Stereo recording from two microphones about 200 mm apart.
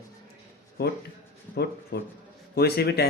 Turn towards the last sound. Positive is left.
turn(degrees=50)  # may be behind; listen again after turning